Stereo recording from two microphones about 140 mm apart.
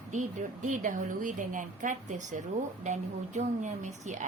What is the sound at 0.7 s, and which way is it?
A woman's voice, 70° right (ahead or behind).